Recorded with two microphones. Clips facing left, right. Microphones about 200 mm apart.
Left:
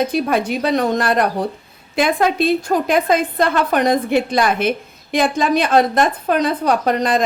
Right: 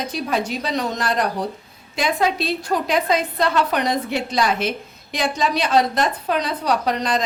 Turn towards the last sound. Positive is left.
turn(degrees=50)  # may be behind; listen again after turning